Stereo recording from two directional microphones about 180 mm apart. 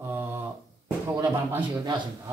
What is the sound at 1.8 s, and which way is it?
Speech, 25° right (ahead or behind).